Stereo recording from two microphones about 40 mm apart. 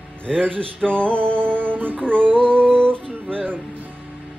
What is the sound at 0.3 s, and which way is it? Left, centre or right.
Music, left.